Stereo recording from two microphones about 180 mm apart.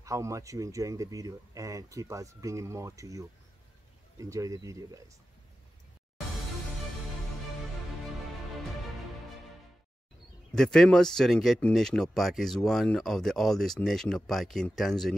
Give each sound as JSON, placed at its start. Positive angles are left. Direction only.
{"t": 0.0, "sound": "speech", "side_deg": -15}
{"t": 10.5, "sound": "speech", "side_deg": 5}